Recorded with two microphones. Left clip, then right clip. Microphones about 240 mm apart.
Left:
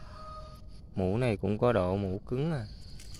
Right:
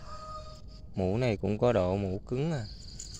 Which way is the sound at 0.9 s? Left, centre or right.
Centre.